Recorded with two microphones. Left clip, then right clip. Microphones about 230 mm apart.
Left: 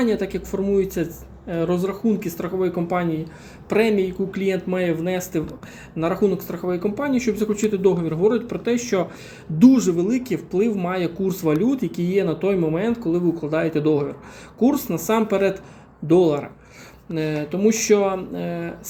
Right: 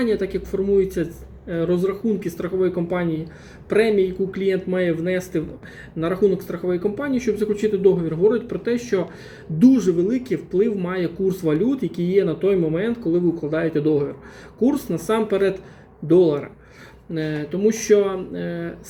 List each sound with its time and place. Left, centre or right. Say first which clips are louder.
0.0 s speech: right 1 dB; centre
3.7 s speech: right 1 dB; left
3.9 s speech: right 2 dB; centre
6.7 s speech: even; centre